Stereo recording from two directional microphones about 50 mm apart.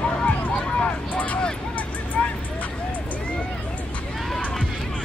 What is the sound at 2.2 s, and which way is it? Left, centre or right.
Vehicle, centre.